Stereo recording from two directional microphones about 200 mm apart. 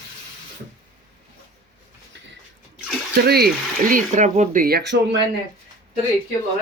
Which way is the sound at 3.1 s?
50° right (ahead or behind).